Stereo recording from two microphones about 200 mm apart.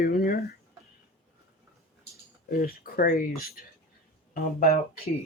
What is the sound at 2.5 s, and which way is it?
Speech, 50° left (ahead or behind).